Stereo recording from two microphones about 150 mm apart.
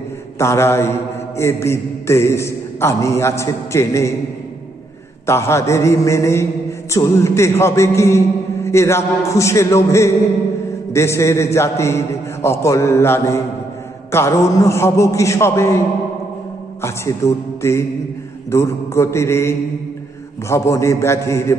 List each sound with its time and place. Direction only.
0.4 s mantra: 15° left (ahead or behind)
5.2 s mantra: 15° left (ahead or behind)
16.8 s mantra: 20° left (ahead or behind)